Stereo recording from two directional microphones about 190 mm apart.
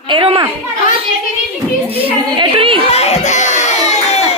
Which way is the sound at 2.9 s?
35° left (ahead or behind).